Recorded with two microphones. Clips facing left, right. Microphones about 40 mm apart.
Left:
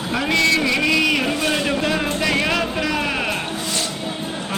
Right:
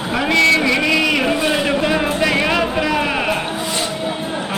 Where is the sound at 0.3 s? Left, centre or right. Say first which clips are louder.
Right 4 dB; centre.